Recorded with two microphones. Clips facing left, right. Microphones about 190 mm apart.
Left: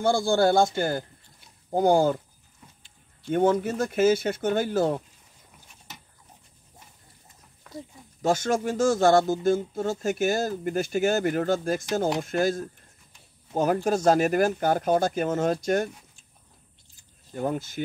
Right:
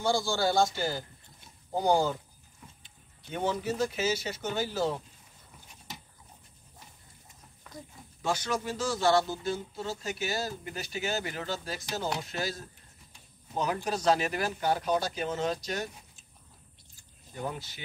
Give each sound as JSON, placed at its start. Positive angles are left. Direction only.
{"t": 0.0, "sound": "speech", "side_deg": 55}
{"t": 3.3, "sound": "speech", "side_deg": 50}
{"t": 8.2, "sound": "speech", "side_deg": 45}
{"t": 13.8, "sound": "speech", "side_deg": 50}
{"t": 17.3, "sound": "speech", "side_deg": 50}